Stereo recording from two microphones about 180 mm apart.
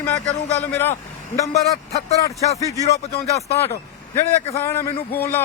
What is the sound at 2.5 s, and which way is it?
Speech, 20° left (ahead or behind).